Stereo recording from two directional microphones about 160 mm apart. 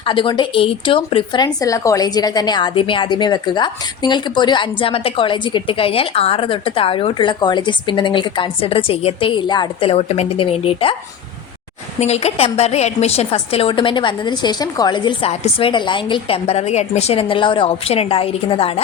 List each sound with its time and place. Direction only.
0.0 s speech: 30° left (ahead or behind)
11.9 s speech: 40° left (ahead or behind)